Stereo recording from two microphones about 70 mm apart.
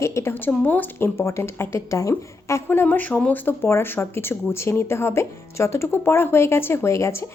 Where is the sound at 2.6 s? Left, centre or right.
Left.